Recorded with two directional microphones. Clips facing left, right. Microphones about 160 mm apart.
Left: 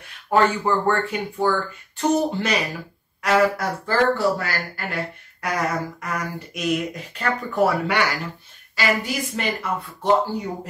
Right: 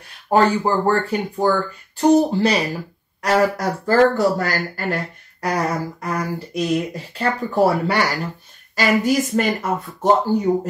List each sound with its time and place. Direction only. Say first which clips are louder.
0.3 s speech: right 3 dB; 35° right (ahead or behind)